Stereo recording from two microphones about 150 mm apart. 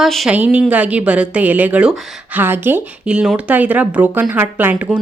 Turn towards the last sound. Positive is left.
turn(degrees=-10)  # may be behind; listen again after turning